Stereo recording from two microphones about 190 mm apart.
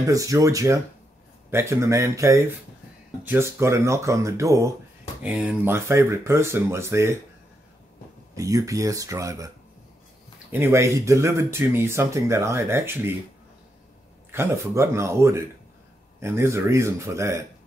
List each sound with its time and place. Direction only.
0.0 s speech: 20° right (ahead or behind)
8.4 s speech: 15° right (ahead or behind)
10.5 s speech: 15° right (ahead or behind)
14.3 s speech: 15° right (ahead or behind)